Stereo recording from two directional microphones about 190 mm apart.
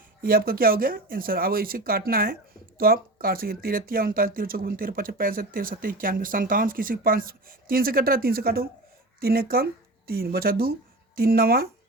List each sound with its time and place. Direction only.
0.2 s speech: 50° right (ahead or behind)